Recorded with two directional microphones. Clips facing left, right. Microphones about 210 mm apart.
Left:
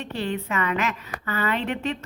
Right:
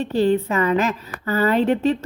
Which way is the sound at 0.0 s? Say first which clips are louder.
Right 10 dB; 35° right (ahead or behind).